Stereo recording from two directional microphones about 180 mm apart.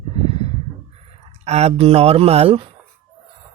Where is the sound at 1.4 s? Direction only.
35° right (ahead or behind).